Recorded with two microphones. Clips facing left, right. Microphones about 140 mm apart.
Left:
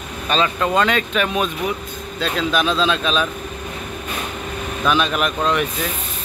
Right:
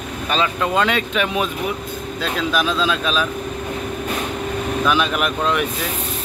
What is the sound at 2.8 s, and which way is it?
Speech, 5° right (ahead or behind).